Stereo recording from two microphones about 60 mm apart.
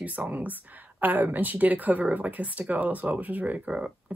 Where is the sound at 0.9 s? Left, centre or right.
Right.